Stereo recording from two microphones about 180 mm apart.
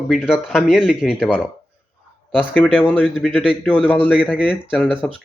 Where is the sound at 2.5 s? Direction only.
10° left (ahead or behind).